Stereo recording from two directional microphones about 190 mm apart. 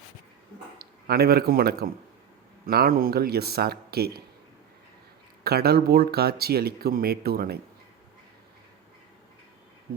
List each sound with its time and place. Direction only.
0.8 s a man's voice: 55° right (ahead or behind)
5.4 s speech: 55° right (ahead or behind)